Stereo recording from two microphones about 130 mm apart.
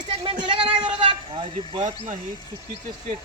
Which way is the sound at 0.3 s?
40° right (ahead or behind).